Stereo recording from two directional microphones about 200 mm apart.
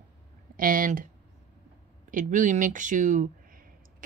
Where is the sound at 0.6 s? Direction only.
45° right (ahead or behind).